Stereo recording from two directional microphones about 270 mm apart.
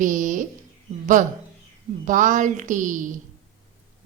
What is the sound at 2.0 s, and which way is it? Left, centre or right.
A woman's voice, right.